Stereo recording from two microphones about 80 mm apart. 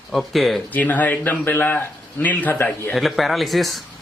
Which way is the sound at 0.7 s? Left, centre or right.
Left.